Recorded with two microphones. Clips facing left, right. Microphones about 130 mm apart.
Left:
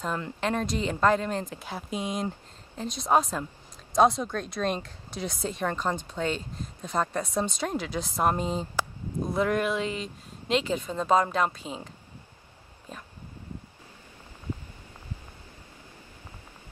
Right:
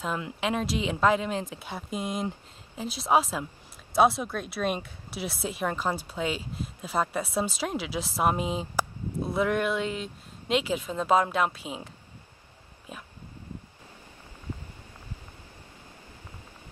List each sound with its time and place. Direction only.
0.0 s speech: 5° right (ahead or behind)